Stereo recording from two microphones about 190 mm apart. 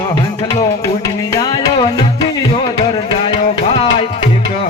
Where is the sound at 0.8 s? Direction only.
20° left (ahead or behind).